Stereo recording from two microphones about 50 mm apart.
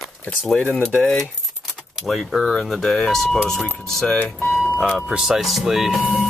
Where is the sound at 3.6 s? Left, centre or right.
Left.